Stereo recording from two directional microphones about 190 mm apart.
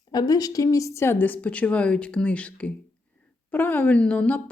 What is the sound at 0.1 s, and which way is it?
Speech, 20° left (ahead or behind).